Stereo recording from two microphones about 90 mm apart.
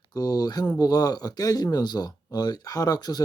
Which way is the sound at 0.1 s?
45° left (ahead or behind).